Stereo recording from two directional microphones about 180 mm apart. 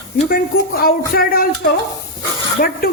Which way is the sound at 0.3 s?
55° left (ahead or behind).